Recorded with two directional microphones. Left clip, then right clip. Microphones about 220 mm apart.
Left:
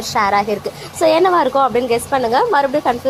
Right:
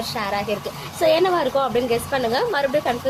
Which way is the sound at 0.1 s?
20° left (ahead or behind).